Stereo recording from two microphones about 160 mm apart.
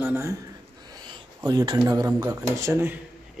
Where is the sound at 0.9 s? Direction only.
25° right (ahead or behind).